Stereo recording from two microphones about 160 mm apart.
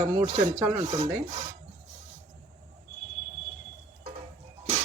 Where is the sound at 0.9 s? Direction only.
45° right (ahead or behind).